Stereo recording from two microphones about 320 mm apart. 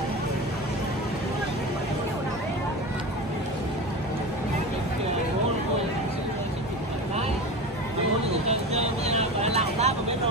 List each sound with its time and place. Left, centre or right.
9.0 s vehicle: centre